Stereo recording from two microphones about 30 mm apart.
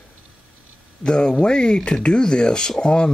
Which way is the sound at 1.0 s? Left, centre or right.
Left.